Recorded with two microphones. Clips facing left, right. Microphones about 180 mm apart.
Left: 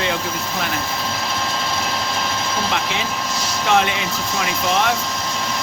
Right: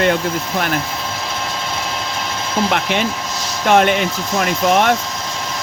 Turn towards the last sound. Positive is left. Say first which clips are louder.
# right 5 dB
turn(degrees=-50)  # may be behind; listen again after turning